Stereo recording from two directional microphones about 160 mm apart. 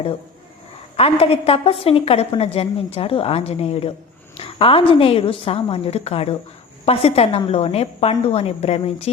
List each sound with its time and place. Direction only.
0.9 s a woman's voice: 35° left (ahead or behind)